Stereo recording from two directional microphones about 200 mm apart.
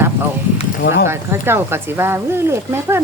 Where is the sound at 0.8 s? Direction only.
55° left (ahead or behind).